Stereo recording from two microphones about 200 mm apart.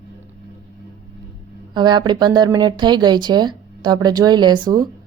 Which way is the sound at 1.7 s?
20° right (ahead or behind).